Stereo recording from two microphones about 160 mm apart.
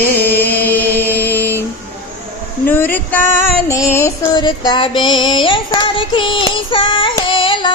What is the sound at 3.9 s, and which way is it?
Child singing, 15° left (ahead or behind).